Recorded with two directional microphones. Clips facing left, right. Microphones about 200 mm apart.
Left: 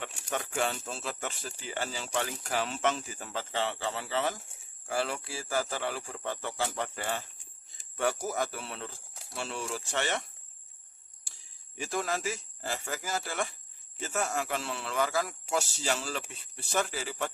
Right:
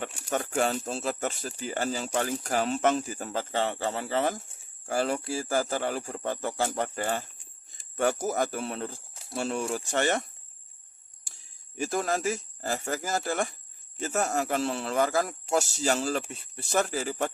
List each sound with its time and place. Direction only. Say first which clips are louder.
0.3 s a sound: right 5 dB; 40° right (ahead or behind)
0.9 s speech: right 7 dB; 40° right (ahead or behind)
11.8 s a man's voice: right 5 dB; 45° right (ahead or behind)